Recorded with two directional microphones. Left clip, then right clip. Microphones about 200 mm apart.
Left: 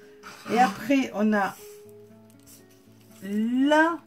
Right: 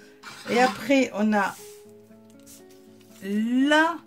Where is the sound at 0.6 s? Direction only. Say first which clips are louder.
Right 2 dB; 35° right (ahead or behind).